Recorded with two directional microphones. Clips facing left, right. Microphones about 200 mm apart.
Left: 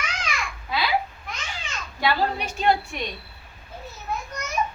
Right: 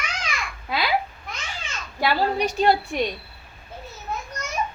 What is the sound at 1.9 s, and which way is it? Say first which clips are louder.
A woman's voice: right 2 dB; 35° right (ahead or behind).